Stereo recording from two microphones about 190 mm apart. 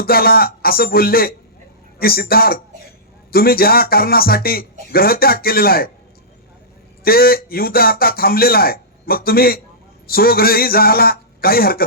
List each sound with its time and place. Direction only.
0.0 s speech: 50° left (ahead or behind)
7.0 s speech: 50° left (ahead or behind)